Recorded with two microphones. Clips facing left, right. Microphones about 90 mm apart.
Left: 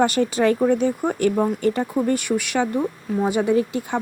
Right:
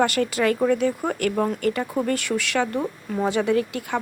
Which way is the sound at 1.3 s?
5° left (ahead or behind).